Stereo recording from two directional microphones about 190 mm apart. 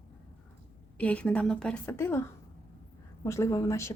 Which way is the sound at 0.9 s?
5° left (ahead or behind).